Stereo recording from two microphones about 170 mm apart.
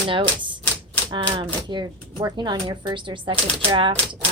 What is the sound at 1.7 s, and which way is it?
A woman's voice, 25° right (ahead or behind).